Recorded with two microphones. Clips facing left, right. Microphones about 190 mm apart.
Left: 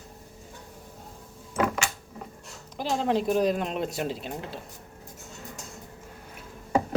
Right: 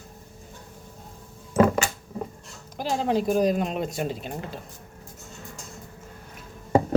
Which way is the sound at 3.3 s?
45° right (ahead or behind).